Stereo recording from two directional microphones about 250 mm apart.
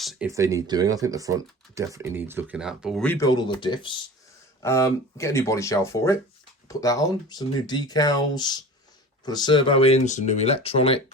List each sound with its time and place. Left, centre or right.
0.0 s speech: centre
0.3 s speech: centre; by 11.0 s left